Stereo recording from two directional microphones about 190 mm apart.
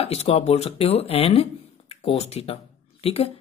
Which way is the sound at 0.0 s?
30° left (ahead or behind).